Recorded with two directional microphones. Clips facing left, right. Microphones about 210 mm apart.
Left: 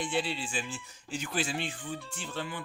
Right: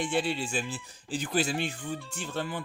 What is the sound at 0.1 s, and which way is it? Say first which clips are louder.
Speech: right 3 dB; 45° right (ahead or behind).